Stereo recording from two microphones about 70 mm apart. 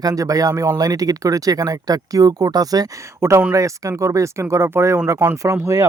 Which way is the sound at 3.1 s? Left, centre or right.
Right.